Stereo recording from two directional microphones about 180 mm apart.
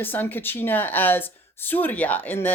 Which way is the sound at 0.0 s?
10° left (ahead or behind).